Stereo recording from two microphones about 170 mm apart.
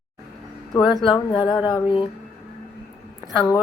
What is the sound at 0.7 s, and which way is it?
Speech, 25° left (ahead or behind).